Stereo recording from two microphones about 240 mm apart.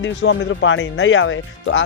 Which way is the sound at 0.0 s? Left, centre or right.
Left.